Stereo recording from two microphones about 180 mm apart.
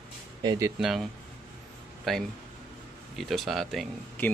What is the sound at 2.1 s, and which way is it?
Speech, centre (ahead or behind).